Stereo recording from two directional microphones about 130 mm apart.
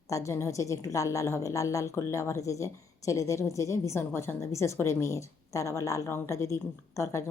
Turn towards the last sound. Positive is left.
turn(degrees=20)  # may be behind; listen again after turning